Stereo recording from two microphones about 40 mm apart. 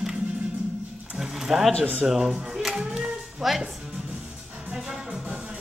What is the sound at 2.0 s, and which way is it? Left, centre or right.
Speech, centre.